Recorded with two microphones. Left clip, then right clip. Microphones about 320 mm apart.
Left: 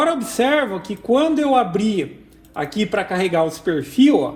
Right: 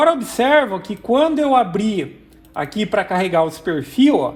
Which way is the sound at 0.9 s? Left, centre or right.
Centre.